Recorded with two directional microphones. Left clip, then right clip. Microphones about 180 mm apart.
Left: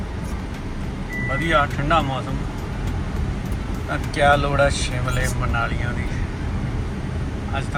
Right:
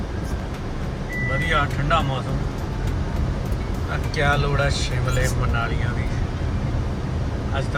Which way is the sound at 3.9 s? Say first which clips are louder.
Left 5 dB; centre (ahead or behind).